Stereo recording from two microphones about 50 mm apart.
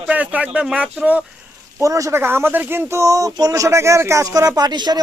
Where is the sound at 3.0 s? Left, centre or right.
Right.